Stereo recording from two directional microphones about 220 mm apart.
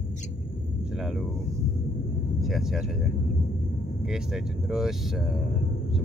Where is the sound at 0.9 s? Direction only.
Centre (ahead or behind).